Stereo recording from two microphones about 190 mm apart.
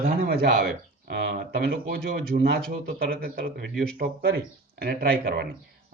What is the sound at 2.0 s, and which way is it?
Speech, 55° right (ahead or behind).